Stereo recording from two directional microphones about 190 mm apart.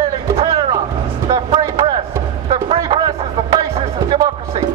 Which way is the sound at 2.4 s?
30° right (ahead or behind).